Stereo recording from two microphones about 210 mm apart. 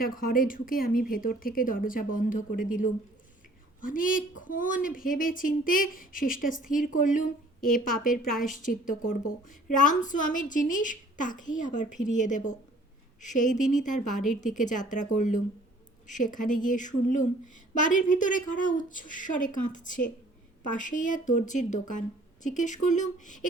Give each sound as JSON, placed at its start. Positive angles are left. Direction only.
{"t": 0.0, "sound": "speech", "side_deg": 45}